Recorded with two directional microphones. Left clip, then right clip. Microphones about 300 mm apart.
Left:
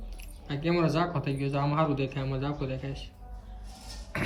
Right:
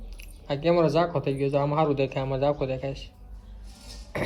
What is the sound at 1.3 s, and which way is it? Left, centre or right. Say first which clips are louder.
Speech: right 5 dB; left.